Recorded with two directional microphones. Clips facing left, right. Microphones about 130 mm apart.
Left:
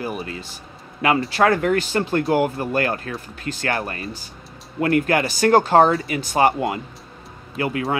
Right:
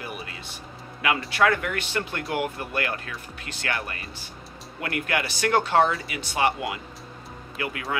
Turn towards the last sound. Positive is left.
turn(degrees=30)  # may be behind; listen again after turning